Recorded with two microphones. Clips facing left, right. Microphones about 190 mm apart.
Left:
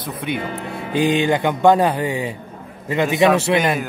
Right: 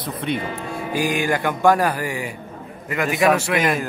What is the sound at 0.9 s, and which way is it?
Speech, 25° left (ahead or behind).